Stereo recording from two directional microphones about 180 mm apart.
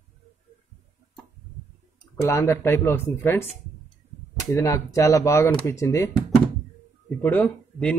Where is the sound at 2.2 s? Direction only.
15° left (ahead or behind).